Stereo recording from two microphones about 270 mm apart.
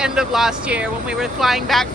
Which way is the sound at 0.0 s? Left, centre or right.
Centre.